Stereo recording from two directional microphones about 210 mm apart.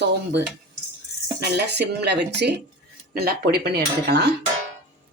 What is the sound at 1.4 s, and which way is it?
Speech, 55° right (ahead or behind).